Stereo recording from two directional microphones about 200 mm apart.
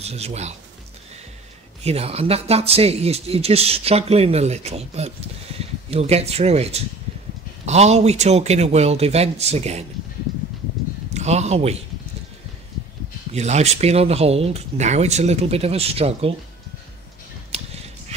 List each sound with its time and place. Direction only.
0.0 s speech: 30° right (ahead or behind)
1.8 s speech: 30° right (ahead or behind)
11.1 s speech: 35° right (ahead or behind)
13.3 s speech: 35° right (ahead or behind)